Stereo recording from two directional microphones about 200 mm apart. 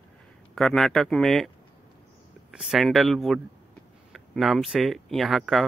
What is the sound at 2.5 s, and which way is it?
Speech, centre (ahead or behind).